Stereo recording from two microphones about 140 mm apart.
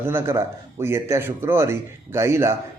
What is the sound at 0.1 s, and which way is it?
A man's voice, 15° right (ahead or behind).